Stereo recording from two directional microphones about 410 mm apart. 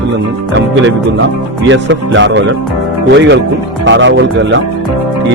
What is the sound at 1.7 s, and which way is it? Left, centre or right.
Speech, right.